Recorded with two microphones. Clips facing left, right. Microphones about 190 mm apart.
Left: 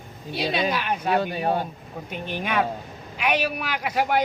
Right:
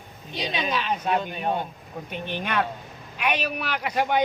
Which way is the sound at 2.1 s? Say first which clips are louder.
Left 2 dB; 10° left (ahead or behind).